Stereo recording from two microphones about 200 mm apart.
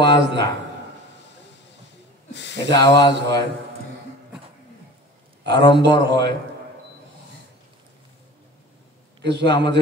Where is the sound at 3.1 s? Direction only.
60° right (ahead or behind).